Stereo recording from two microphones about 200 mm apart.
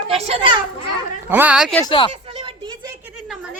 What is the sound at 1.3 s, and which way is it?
Speech, 5° right (ahead or behind).